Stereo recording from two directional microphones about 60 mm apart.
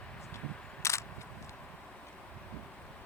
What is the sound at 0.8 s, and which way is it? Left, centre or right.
Single-lens reflex camera, left.